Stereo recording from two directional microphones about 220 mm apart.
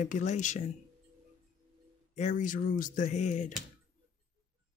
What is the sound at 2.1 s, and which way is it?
Speech, 35° left (ahead or behind).